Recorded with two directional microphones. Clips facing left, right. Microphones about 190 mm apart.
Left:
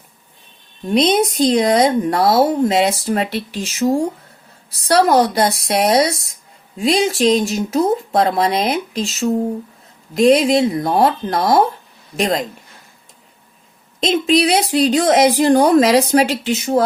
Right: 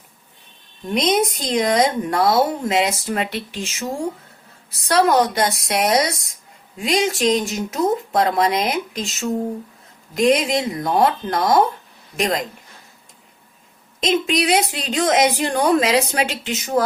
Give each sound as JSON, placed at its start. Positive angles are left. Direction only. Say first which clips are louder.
{"t": 0.9, "sound": "speech", "louder": "left 5 dB", "side_deg": 30}
{"t": 10.2, "sound": "speech", "louder": "left 5 dB", "side_deg": 35}
{"t": 14.0, "sound": "speech", "louder": "left 4 dB", "side_deg": 35}